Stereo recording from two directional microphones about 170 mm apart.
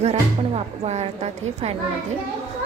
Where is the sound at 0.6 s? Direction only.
40° right (ahead or behind).